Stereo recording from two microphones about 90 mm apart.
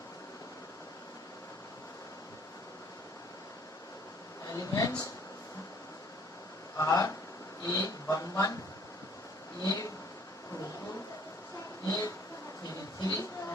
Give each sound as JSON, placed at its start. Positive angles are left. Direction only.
{"t": 4.4, "sound": "speech", "side_deg": 40}
{"t": 6.7, "sound": "speech", "side_deg": 40}
{"t": 9.6, "sound": "speech", "side_deg": 40}
{"t": 11.9, "sound": "speech", "side_deg": 40}
{"t": 13.0, "sound": "a sound", "side_deg": 40}